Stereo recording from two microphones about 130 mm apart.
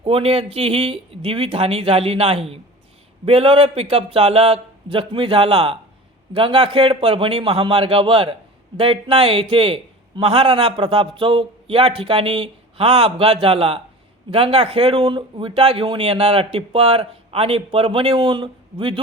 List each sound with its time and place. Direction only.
0.0 s a man's voice: 50° right (ahead or behind)